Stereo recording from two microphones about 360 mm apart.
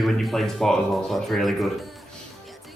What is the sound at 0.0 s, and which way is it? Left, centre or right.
A man's voice, centre.